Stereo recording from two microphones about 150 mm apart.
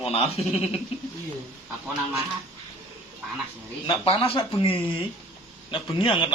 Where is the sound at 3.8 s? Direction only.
35° left (ahead or behind).